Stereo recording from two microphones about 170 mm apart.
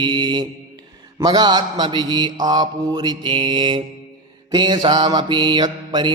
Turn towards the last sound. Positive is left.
turn(degrees=-25)  # may be behind; listen again after turning